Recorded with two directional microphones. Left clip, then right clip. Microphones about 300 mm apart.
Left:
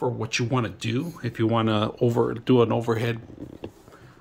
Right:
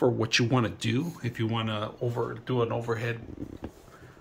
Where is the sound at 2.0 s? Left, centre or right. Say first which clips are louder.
Left 10 dB; left.